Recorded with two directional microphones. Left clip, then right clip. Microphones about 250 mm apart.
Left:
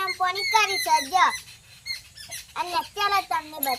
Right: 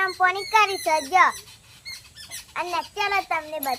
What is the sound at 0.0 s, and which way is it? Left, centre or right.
A child's voice, centre.